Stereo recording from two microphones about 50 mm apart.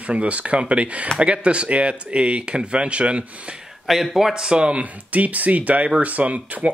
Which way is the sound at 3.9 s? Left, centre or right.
Centre.